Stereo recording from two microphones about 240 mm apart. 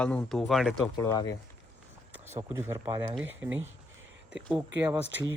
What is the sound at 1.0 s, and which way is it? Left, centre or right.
Speech, centre.